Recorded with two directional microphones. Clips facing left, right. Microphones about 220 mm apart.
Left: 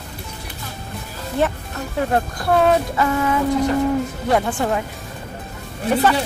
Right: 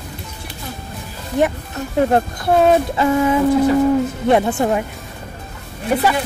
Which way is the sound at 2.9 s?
25° right (ahead or behind).